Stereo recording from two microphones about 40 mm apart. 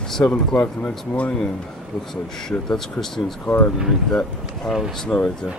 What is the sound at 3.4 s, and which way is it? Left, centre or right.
Speech, left.